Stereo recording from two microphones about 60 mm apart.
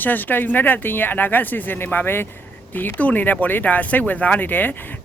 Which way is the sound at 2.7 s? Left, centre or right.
Left.